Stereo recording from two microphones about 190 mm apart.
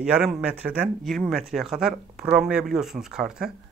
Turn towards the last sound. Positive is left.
turn(degrees=-5)  # may be behind; listen again after turning